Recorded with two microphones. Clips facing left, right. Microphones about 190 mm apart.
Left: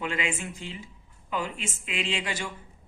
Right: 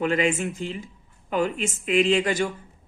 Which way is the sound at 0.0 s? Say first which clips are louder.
Right 9 dB; 40° right (ahead or behind).